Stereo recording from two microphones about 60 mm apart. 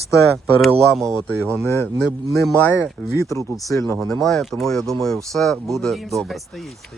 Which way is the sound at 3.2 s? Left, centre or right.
Left.